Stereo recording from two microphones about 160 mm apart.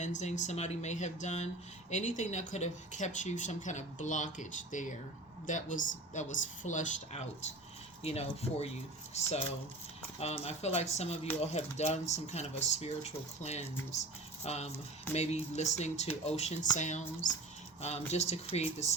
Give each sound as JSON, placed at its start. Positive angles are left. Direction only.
{"t": 0.0, "sound": "speech", "side_deg": 45}
{"t": 10.2, "sound": "speech", "side_deg": 40}